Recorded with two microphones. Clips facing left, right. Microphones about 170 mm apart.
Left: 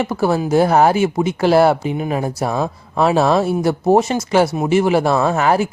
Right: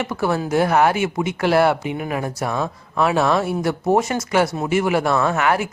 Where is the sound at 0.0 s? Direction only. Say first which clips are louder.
Left 4 dB; 30° left (ahead or behind).